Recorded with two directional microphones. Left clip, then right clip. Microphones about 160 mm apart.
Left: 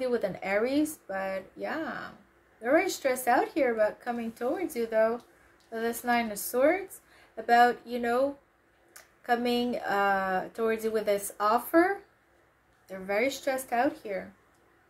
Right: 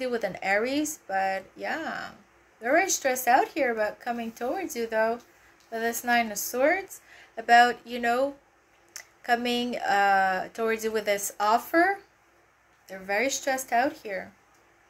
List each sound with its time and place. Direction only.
0.0 s speech: 20° left (ahead or behind)